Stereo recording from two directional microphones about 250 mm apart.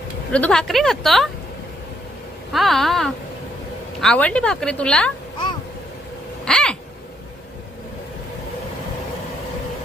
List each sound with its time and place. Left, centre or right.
0.3 s a woman's voice: centre
2.5 s a woman's voice: centre
6.4 s a sound: centre